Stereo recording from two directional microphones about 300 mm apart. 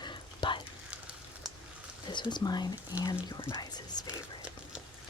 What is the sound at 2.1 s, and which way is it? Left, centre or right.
Speech, centre.